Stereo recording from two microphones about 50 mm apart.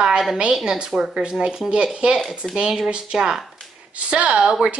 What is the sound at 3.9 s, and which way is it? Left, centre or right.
Speech, right.